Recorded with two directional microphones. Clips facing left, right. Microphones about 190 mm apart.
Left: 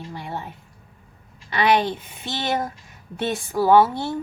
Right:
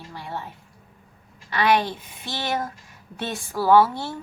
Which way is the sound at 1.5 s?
20° left (ahead or behind).